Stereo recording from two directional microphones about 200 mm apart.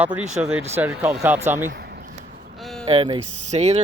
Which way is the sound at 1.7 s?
55° right (ahead or behind).